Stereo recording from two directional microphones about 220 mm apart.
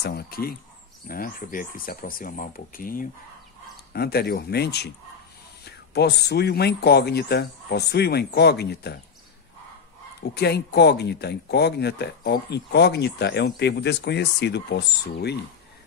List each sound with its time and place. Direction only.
0.0 s speech: 45° left (ahead or behind)
10.3 s speech: 45° left (ahead or behind)